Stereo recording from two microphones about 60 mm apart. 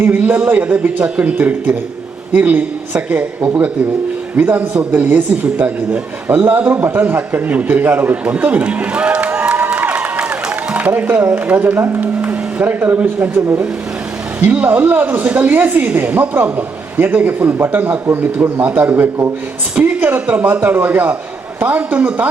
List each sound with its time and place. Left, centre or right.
0.0 s speech: right
4.4 s speech: right
9.9 s a sound: right
11.4 s a man's voice: right